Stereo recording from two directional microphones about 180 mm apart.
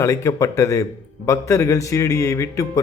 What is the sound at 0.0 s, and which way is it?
A man's voice, 20° left (ahead or behind).